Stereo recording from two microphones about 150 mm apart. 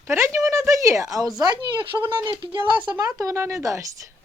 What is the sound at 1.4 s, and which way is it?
Speech, 30° right (ahead or behind).